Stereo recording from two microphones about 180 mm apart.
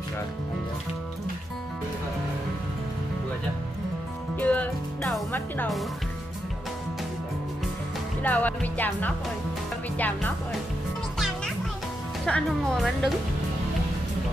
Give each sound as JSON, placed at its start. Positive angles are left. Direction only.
{"t": 4.4, "sound": "music", "side_deg": 10}
{"t": 8.2, "sound": "speech", "side_deg": 10}
{"t": 11.1, "sound": "music", "side_deg": 0}
{"t": 12.3, "sound": "speech", "side_deg": 5}